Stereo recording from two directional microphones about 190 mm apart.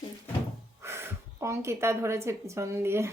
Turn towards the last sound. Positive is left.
turn(degrees=-15)  # may be behind; listen again after turning